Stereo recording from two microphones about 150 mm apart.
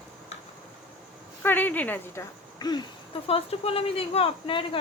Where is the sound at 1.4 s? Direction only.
15° left (ahead or behind).